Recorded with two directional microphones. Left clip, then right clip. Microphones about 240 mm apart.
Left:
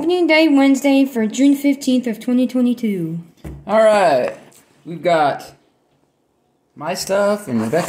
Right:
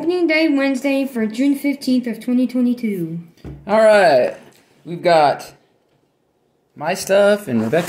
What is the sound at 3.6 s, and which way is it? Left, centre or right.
Speech, centre.